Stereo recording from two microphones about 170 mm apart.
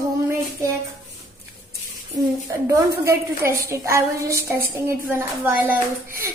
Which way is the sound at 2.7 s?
20° right (ahead or behind).